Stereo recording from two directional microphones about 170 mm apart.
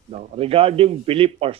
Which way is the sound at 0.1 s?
35° right (ahead or behind).